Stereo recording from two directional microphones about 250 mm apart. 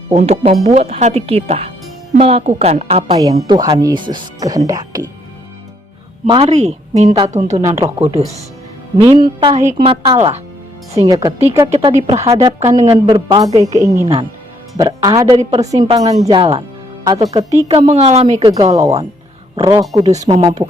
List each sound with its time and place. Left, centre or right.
0.1 s speech: right
6.2 s speech: right
7.6 s speech: centre
13.5 s speech: right; by 20.7 s centre